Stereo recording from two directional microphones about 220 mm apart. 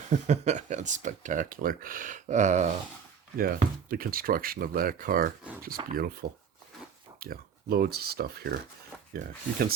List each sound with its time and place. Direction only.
0.1 s speech: 35° right (ahead or behind)
5.8 s speech: 20° right (ahead or behind)
6.2 s speech: 45° right (ahead or behind)